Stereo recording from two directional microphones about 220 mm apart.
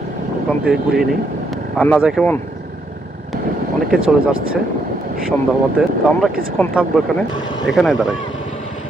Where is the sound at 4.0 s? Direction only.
65° right (ahead or behind).